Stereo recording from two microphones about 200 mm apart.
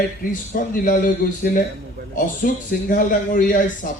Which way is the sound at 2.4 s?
40° left (ahead or behind).